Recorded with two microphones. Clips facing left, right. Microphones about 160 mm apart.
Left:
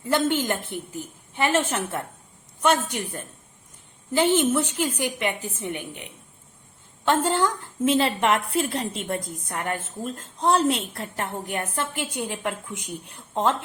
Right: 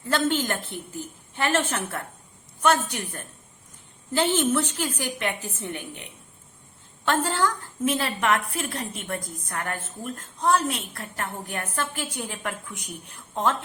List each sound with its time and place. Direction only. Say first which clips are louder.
0.1 s a woman's voice: left 2 dB; 20° left (ahead or behind)
7.0 s a woman's voice: left 2 dB; 20° left (ahead or behind)